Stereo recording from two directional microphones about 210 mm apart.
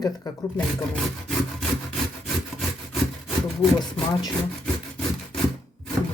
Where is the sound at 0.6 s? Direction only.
5° left (ahead or behind).